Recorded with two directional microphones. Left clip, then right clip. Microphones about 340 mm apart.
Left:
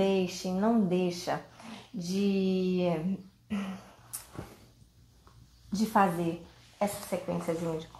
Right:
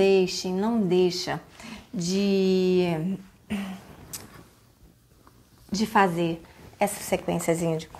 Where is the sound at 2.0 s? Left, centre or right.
Right.